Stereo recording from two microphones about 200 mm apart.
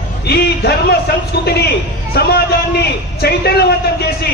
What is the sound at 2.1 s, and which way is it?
Speech, 50° left (ahead or behind).